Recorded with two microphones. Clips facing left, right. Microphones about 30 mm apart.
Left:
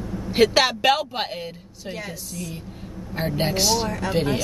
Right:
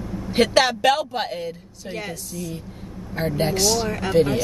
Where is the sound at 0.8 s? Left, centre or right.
Centre.